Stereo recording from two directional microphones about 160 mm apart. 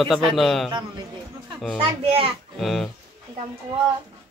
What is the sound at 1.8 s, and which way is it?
Speech, 35° right (ahead or behind).